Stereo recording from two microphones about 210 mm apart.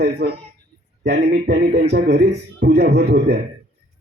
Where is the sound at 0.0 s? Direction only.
50° right (ahead or behind).